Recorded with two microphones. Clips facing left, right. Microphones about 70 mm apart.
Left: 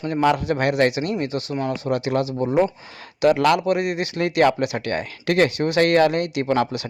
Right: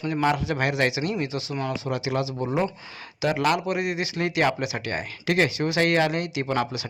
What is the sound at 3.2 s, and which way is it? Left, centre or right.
Speech, left.